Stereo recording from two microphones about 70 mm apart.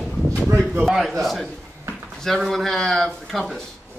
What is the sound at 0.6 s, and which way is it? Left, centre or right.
Speech, centre.